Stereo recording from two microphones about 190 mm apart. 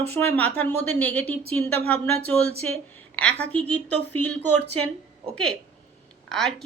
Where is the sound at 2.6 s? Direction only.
10° left (ahead or behind).